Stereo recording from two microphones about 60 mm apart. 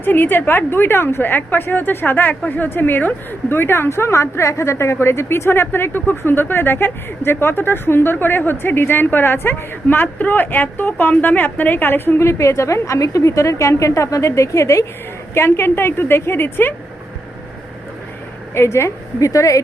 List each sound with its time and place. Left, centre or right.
0.0 s a woman's voice: left
15.4 s a woman's voice: left
18.5 s speech: left
19.2 s a woman's voice: left